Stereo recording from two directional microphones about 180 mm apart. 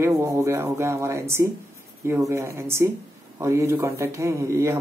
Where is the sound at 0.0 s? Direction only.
15° right (ahead or behind).